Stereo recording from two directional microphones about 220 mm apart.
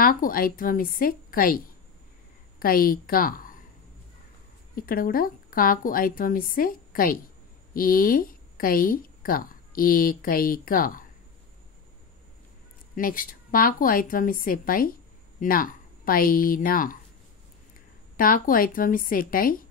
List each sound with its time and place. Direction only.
0.0 s a woman's voice: 40° left (ahead or behind)
2.6 s a woman's voice: 40° left (ahead or behind)
4.7 s a woman's voice: 40° left (ahead or behind)
12.9 s a woman's voice: 40° left (ahead or behind)
18.1 s a woman's voice: 40° left (ahead or behind)